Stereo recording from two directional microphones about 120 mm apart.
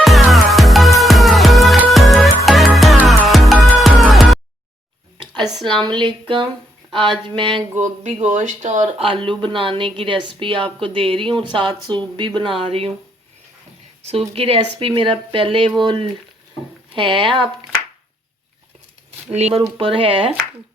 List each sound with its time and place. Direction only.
0.0 s music: centre (ahead or behind)
5.5 s speech: 40° right (ahead or behind)
7.8 s speech: 75° right (ahead or behind)
9.0 s speech: 45° right (ahead or behind)
14.0 s speech: 60° right (ahead or behind)
19.4 s speech: 60° right (ahead or behind)
19.7 s speech: 50° right (ahead or behind)